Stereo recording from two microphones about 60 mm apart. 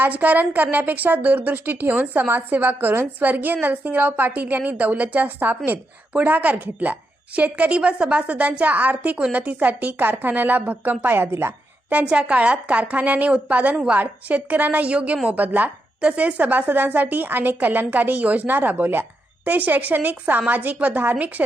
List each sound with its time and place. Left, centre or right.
0.0 s a woman's voice: right
12.0 s a woman's voice: right